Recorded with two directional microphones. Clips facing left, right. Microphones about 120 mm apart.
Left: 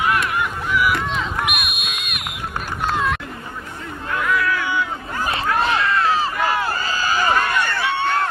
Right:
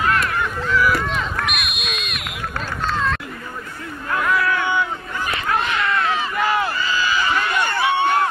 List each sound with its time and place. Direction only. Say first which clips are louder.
0.3 s honk: right 1 dB; 15° left (ahead or behind)
0.9 s run: right 1 dB; centre (ahead or behind)
1.3 s a sound: left 1 dB; 15° left (ahead or behind)
2.9 s chatter: left 1 dB; 15° left (ahead or behind)
4.3 s cat: right 1 dB; 30° right (ahead or behind)
5.1 s crowd: left 2 dB; 35° left (ahead or behind)
7.6 s a sound: right 3 dB; 15° right (ahead or behind)